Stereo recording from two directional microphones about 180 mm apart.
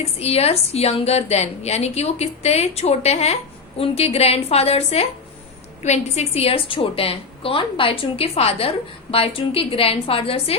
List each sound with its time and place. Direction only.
0.0 s a woman's voice: 35° left (ahead or behind)